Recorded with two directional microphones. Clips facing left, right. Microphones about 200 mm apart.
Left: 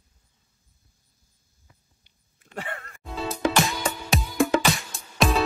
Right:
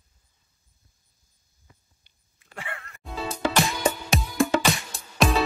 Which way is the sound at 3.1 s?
Centre (ahead or behind).